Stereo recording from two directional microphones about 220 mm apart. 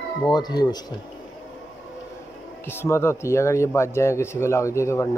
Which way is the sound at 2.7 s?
10° left (ahead or behind).